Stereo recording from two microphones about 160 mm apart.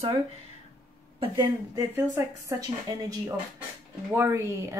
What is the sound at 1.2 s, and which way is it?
Speech, 25° right (ahead or behind).